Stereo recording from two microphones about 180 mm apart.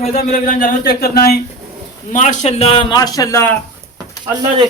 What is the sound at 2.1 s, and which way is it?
A man's voice, 40° left (ahead or behind).